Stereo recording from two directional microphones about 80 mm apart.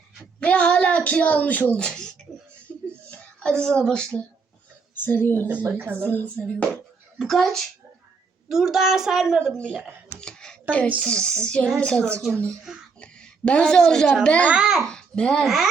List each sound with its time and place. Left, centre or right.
0.3 s a sound: centre
3.1 s a child's voice: centre
4.9 s a woman's voice: left
5.7 s speech: right
6.0 s speech: centre
7.2 s speech: centre
9.4 s a child's voice: centre
10.2 s a sound: centre
11.0 s a child's voice: centre
14.5 s a child's voice: centre
14.8 s a child's voice: centre